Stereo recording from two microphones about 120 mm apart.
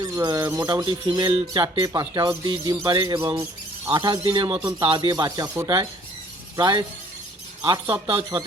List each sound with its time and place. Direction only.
0.0 s speech: 35° right (ahead or behind)
1.9 s speech: 30° right (ahead or behind)